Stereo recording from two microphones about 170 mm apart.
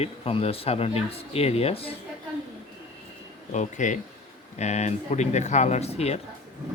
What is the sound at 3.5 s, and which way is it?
Speech, 45° left (ahead or behind).